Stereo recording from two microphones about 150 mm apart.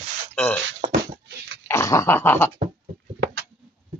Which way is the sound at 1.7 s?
20° left (ahead or behind).